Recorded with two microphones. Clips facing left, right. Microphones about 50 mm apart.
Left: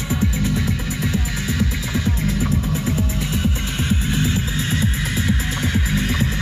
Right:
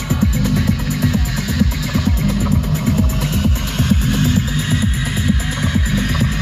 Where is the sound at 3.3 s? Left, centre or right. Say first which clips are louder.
Right 3 dB; left.